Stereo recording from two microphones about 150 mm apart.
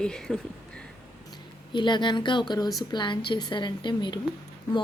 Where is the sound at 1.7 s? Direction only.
30° left (ahead or behind).